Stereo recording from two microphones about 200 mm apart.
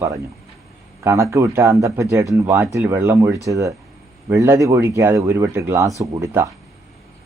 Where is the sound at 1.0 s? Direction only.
15° right (ahead or behind).